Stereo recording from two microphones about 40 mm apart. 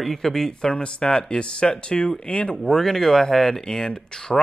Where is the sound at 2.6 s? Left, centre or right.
Centre.